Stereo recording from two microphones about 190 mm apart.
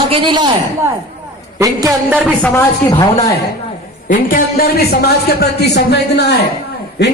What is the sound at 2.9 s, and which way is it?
Speech, 25° left (ahead or behind).